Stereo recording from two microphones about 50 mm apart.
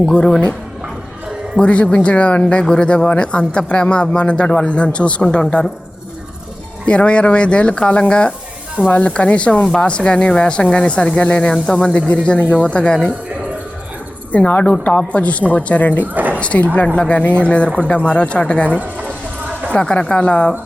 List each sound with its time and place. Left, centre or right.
0.0 s speech: centre
1.5 s speech: left
6.8 s speech: left
12.6 s speech: centre
14.3 s speech: left
16.1 s dog: right
16.4 s speech: left
18.8 s a sound: right
19.7 s speech: left